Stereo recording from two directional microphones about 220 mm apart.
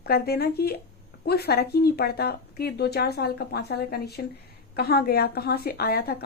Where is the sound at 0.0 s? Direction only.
45° left (ahead or behind).